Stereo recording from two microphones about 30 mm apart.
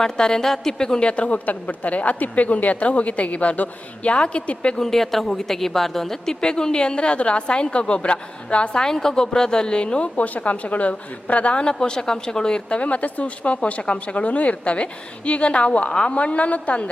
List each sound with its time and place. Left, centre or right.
0.0 s a woman's voice: left
1.0 s a woman's voice: left
1.5 s a woman's voice: left
4.8 s a woman's voice: centre
6.4 s a woman's voice: left
8.7 s a woman's voice: left
10.2 s a woman's voice: left
11.6 s a woman's voice: left
12.6 s a woman's voice: left
14.3 s a woman's voice: left
15.9 s a woman's voice: left
16.1 s a woman's voice: left